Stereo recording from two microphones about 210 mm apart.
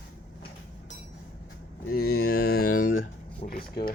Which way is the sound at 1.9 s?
45° left (ahead or behind).